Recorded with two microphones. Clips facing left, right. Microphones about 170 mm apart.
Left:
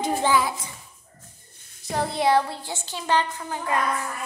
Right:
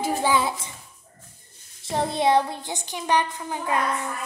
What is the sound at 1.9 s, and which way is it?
Child singing, 20° right (ahead or behind).